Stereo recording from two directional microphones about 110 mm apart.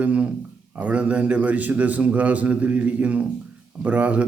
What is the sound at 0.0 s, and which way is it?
A man's voice, 15° right (ahead or behind).